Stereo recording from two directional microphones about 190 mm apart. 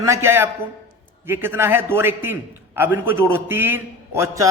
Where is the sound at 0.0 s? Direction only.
15° right (ahead or behind).